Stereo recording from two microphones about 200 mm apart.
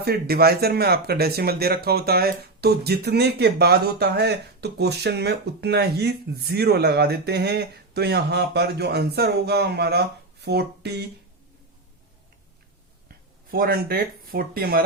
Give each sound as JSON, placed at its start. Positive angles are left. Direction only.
{"t": 0.0, "sound": "speech", "side_deg": -50}
{"t": 13.1, "sound": "speech", "side_deg": -50}